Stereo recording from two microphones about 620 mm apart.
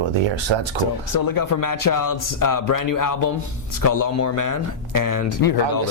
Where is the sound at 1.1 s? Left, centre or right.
Left.